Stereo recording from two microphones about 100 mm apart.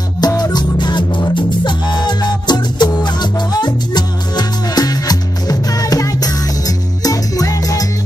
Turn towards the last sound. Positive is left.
turn(degrees=35)  # may be behind; listen again after turning